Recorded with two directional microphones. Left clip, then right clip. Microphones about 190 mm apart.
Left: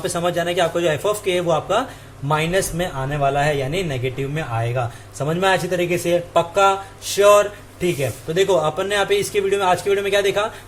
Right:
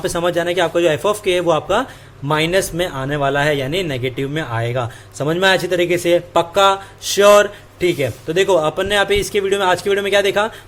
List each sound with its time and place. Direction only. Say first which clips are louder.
0.0 s a man's voice: right 3 dB; 30° right (ahead or behind)